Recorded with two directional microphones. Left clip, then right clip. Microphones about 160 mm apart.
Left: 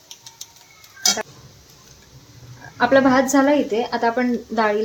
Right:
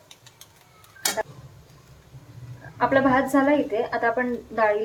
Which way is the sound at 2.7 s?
65° left (ahead or behind).